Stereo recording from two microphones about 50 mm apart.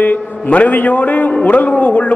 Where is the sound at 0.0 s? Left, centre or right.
Left.